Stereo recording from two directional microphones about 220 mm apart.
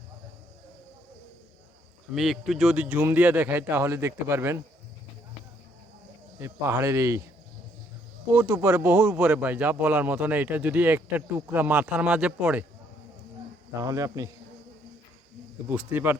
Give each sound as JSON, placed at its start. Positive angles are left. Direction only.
{"t": 2.1, "sound": "speech", "side_deg": 0}
{"t": 6.4, "sound": "speech", "side_deg": -10}
{"t": 8.3, "sound": "speech", "side_deg": -5}
{"t": 13.8, "sound": "speech", "side_deg": -15}
{"t": 15.7, "sound": "speech", "side_deg": -10}